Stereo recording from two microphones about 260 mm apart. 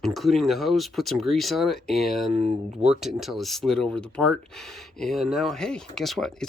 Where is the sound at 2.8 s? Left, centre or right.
Centre.